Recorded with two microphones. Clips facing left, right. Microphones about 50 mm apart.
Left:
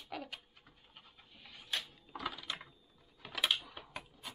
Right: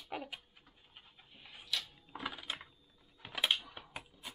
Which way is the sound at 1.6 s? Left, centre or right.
Left.